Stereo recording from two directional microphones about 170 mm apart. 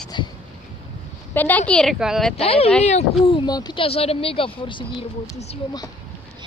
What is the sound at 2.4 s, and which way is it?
Speech, 35° left (ahead or behind).